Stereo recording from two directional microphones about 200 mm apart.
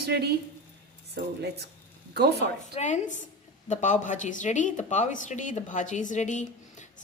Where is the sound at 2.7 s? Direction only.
35° left (ahead or behind).